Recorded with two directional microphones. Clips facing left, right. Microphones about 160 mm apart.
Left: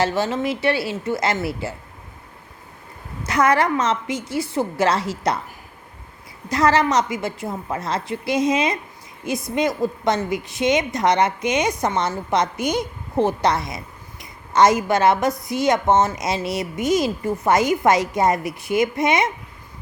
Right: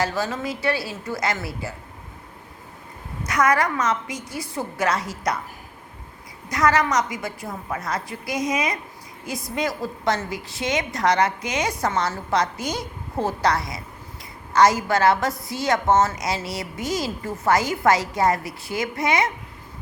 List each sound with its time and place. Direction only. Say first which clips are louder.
0.0 s a woman's voice: left 4 dB; 25° left (ahead or behind)
3.2 s a woman's voice: left 3 dB; 30° left (ahead or behind)
6.5 s a woman's voice: left 3 dB; 30° left (ahead or behind)